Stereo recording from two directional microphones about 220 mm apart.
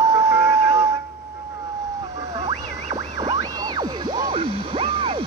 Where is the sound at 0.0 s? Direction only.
15° right (ahead or behind).